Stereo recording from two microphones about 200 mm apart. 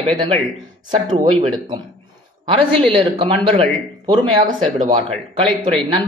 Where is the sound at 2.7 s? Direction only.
25° right (ahead or behind).